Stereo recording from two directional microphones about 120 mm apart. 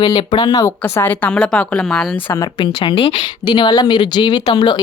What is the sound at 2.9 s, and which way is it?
Speech, 60° left (ahead or behind).